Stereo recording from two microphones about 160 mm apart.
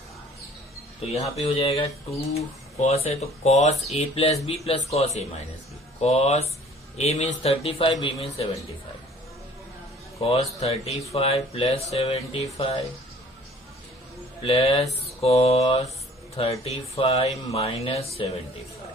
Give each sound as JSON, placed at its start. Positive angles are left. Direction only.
{"t": 1.0, "sound": "speech", "side_deg": 40}
{"t": 10.2, "sound": "speech", "side_deg": 40}
{"t": 14.4, "sound": "speech", "side_deg": 35}